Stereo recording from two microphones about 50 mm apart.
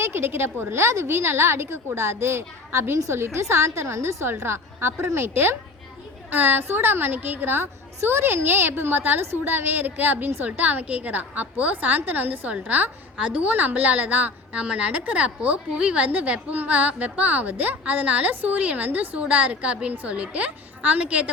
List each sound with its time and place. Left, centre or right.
0.0 s a woman's voice: right
1.0 s a woman's voice: right
6.3 s a woman's voice: right